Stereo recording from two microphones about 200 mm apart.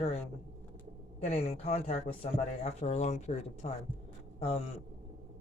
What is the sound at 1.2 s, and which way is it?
Speech, 30° left (ahead or behind).